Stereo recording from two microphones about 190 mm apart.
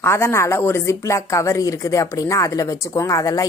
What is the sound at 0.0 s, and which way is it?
A woman's voice, 15° left (ahead or behind).